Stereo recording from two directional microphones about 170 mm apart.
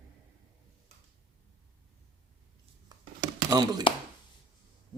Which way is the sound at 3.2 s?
25° right (ahead or behind).